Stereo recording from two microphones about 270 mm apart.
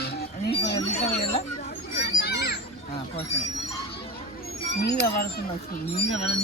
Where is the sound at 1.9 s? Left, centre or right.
Left.